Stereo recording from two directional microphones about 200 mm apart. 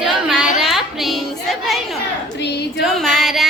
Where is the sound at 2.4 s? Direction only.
55° left (ahead or behind).